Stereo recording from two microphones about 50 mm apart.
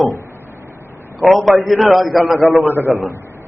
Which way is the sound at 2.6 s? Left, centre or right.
Right.